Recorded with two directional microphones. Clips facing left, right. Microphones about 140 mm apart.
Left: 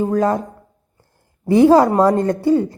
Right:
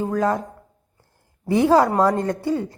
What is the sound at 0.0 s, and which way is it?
Speech, 35° left (ahead or behind).